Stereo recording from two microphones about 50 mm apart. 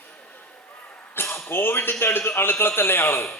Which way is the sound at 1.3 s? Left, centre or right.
Left.